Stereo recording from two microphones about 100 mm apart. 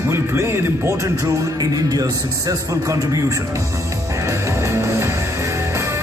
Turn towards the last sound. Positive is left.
turn(degrees=-30)  # may be behind; listen again after turning